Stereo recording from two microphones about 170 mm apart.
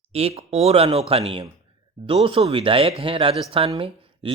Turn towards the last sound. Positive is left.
turn(degrees=-35)  # may be behind; listen again after turning